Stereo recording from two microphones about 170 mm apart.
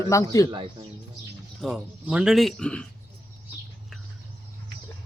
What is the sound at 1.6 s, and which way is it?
Speech, 5° right (ahead or behind).